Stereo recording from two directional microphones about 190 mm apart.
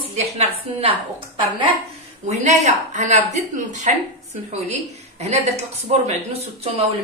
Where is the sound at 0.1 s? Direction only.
35° right (ahead or behind).